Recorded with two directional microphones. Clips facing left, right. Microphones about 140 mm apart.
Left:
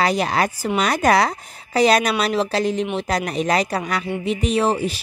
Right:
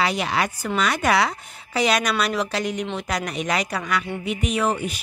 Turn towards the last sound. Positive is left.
turn(degrees=30)  # may be behind; listen again after turning